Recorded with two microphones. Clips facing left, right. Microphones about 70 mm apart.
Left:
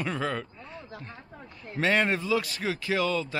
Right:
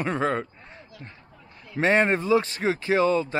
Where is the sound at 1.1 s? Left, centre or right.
Left.